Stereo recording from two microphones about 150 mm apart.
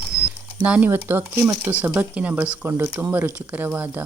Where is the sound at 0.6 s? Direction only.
10° right (ahead or behind).